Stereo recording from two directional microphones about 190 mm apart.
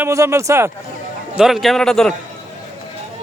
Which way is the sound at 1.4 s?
Centre (ahead or behind).